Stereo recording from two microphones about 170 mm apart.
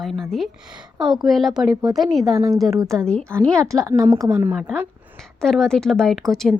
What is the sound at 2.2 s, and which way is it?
Speech, 20° right (ahead or behind).